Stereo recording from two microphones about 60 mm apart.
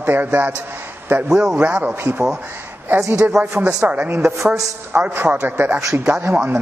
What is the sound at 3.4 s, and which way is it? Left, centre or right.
Speech, right.